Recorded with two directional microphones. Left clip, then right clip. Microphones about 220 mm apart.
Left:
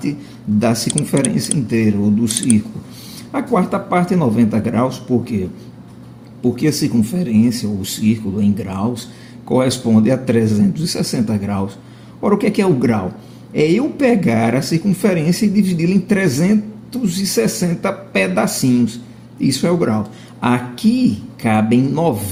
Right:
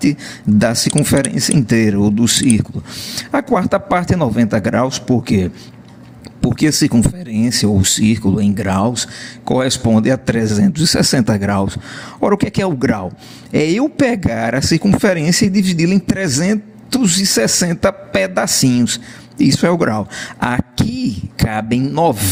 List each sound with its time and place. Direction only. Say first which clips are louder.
0.6 s speech: right 2 dB; 50° right (ahead or behind)
6.6 s speech: right 6 dB; 50° right (ahead or behind)